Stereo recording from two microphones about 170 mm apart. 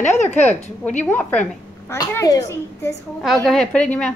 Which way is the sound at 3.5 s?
5° left (ahead or behind).